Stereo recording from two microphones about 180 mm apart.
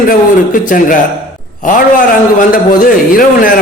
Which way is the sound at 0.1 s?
45° left (ahead or behind).